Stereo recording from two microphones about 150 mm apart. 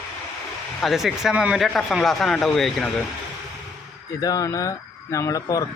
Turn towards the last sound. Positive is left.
turn(degrees=25)  # may be behind; listen again after turning